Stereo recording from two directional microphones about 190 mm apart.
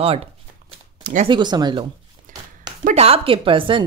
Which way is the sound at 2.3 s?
45° right (ahead or behind).